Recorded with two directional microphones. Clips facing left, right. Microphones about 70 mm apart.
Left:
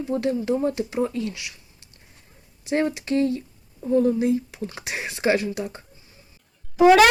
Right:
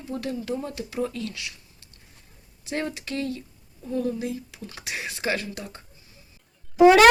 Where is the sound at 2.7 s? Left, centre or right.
Left.